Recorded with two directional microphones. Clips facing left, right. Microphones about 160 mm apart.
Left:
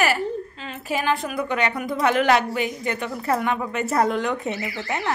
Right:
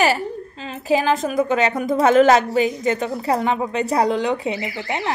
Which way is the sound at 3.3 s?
30° right (ahead or behind).